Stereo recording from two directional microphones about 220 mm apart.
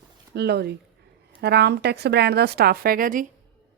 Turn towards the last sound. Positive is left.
turn(degrees=-40)  # may be behind; listen again after turning